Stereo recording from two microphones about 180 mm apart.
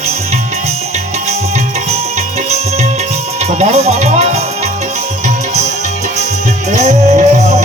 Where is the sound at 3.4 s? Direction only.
40° right (ahead or behind).